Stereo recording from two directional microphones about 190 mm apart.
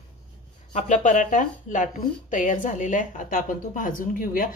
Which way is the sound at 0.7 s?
40° left (ahead or behind).